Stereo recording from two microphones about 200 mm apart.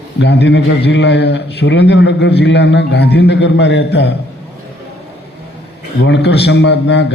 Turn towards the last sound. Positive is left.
turn(degrees=60)  # may be behind; listen again after turning